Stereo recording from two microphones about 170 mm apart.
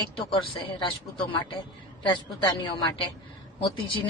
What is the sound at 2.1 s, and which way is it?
Speech, 25° left (ahead or behind).